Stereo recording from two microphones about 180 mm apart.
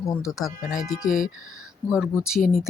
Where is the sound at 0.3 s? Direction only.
Centre (ahead or behind).